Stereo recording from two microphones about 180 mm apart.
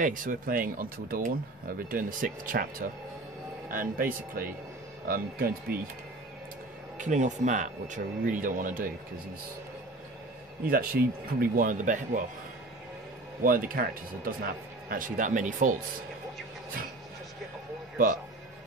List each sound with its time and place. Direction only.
0.0 s speech: 50° right (ahead or behind)
3.7 s speech: 50° right (ahead or behind)
7.0 s speech: 40° right (ahead or behind)
10.6 s speech: 55° right (ahead or behind)
13.4 s speech: 50° right (ahead or behind)